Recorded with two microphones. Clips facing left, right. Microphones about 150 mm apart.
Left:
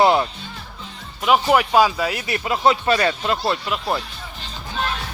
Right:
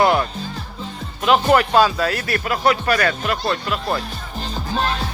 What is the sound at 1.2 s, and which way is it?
A man's voice, 10° left (ahead or behind).